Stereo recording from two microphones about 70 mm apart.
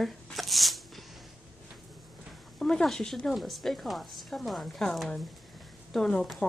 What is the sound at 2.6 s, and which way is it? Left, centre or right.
A woman's voice, centre.